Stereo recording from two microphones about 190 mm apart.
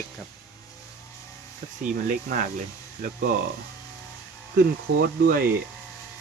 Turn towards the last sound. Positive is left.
turn(degrees=-50)  # may be behind; listen again after turning